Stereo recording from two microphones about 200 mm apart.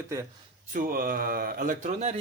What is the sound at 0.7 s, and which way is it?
A man's voice, 45° right (ahead or behind).